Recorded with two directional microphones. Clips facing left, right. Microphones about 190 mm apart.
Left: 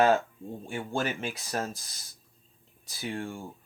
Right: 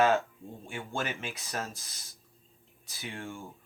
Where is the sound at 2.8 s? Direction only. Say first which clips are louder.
Left 6 dB; 35° left (ahead or behind).